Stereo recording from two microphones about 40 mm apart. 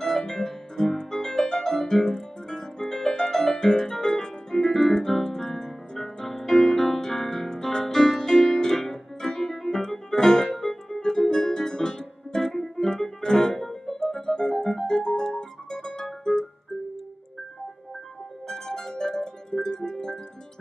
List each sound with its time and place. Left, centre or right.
0.0 s keyboard: centre
10.7 s music: centre
18.5 s music: centre